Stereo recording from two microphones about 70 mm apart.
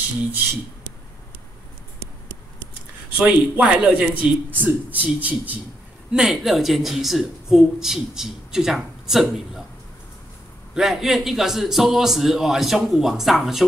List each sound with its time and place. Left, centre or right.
3.2 s speech: centre
6.1 s speech: centre
10.7 s speech: centre